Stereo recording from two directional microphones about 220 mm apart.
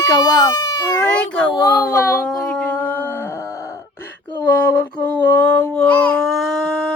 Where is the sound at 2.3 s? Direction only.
5° left (ahead or behind).